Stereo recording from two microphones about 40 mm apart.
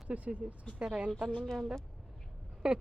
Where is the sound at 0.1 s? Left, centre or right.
Right.